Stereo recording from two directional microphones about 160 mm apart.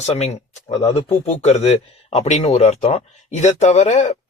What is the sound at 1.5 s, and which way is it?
Speech, 45° left (ahead or behind).